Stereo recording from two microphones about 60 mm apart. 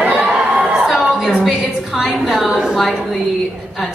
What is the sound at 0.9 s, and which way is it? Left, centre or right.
A woman's voice, centre.